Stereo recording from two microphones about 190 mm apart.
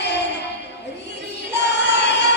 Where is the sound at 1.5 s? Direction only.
65° left (ahead or behind).